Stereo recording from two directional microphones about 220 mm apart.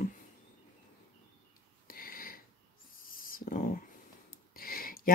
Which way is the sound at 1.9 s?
40° left (ahead or behind).